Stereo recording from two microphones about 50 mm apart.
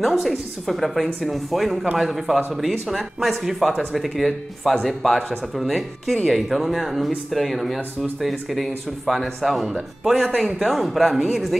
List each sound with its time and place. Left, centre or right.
0.0 s speech: centre
10.1 s speech: centre